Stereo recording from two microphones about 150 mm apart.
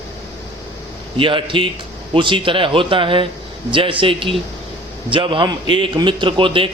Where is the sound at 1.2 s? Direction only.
35° right (ahead or behind).